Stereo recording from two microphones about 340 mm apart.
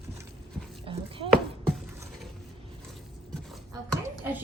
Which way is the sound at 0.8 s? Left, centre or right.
Centre.